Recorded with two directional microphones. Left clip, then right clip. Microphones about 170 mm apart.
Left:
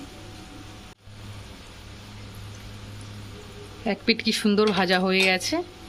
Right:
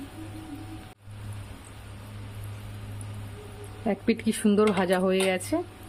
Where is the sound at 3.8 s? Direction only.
5° right (ahead or behind).